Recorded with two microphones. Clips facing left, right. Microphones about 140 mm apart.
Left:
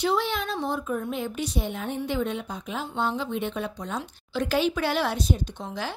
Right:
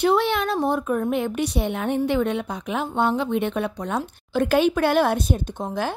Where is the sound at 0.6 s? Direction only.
60° right (ahead or behind).